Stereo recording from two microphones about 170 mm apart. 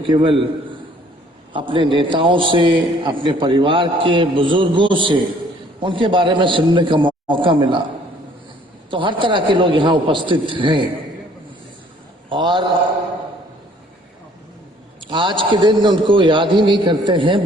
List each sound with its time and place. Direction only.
0.1 s a man's voice: 30° right (ahead or behind)
1.5 s a man's voice: 30° right (ahead or behind)
8.9 s a man's voice: 30° right (ahead or behind)
12.3 s a man's voice: 30° right (ahead or behind)
15.1 s a man's voice: 30° right (ahead or behind)